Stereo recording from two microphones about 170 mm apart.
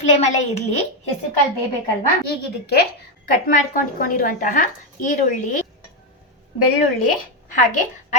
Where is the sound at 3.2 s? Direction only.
55° left (ahead or behind).